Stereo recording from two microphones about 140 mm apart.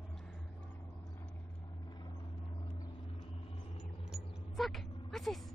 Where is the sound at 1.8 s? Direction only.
30° left (ahead or behind).